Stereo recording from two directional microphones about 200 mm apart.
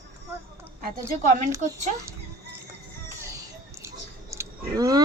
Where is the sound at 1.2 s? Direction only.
40° right (ahead or behind).